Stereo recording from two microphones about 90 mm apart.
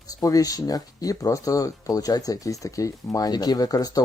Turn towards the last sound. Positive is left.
turn(degrees=45)  # may be behind; listen again after turning